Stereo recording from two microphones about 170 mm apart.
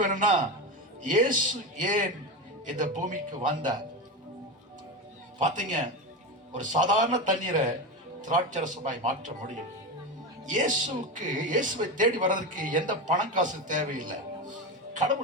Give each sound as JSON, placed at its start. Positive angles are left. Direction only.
{"t": 0.0, "sound": "speech", "side_deg": -50}
{"t": 5.4, "sound": "speech", "side_deg": -45}